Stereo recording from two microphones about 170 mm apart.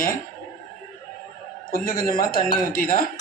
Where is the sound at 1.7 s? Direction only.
60° left (ahead or behind).